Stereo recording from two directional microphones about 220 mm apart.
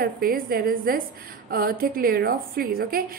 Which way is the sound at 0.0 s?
45° right (ahead or behind).